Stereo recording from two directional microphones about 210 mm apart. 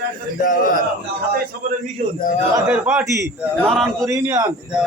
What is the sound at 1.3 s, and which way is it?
Speech, 40° right (ahead or behind).